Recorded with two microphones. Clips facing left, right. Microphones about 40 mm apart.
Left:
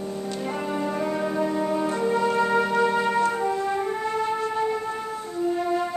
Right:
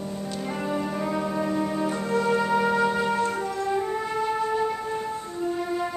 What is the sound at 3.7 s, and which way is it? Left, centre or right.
Music, centre.